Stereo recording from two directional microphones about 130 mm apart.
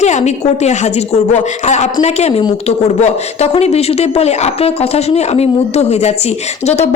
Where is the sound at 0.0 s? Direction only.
60° left (ahead or behind).